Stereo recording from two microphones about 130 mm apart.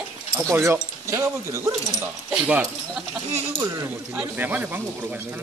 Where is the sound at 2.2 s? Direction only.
10° right (ahead or behind).